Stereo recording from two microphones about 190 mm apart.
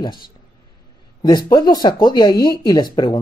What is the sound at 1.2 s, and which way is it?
Speech, 20° left (ahead or behind).